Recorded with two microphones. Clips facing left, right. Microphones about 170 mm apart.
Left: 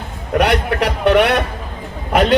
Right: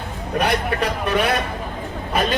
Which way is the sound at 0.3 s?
75° left (ahead or behind).